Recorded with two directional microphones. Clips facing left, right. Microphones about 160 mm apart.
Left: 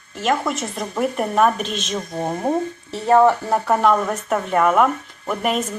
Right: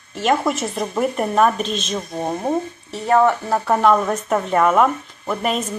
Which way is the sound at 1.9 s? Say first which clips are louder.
Left 2 dB; 10° right (ahead or behind).